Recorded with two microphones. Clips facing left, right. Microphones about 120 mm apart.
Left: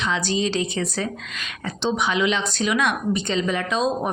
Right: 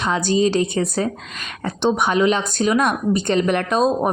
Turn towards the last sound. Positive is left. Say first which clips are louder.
# right 5 dB
turn(degrees=-45)  # may be behind; listen again after turning